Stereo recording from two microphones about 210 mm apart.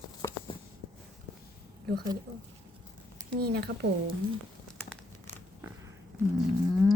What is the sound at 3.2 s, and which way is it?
Speech, 50° right (ahead or behind).